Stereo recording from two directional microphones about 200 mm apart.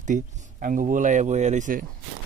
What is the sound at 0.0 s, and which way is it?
Speech, 40° right (ahead or behind).